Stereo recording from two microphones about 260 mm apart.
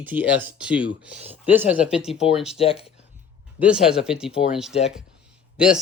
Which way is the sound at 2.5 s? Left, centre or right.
Left.